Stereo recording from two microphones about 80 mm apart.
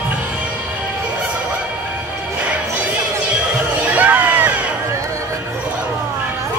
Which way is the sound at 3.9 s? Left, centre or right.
Centre.